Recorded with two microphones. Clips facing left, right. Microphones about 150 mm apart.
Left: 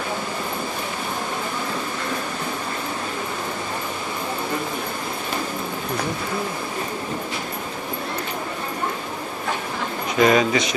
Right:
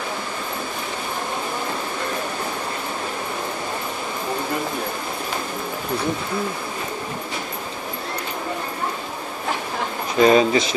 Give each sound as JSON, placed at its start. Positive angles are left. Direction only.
{"t": 10.1, "sound": "speech", "side_deg": -30}